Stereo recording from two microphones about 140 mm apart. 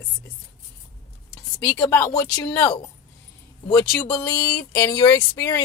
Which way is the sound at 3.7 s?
10° left (ahead or behind).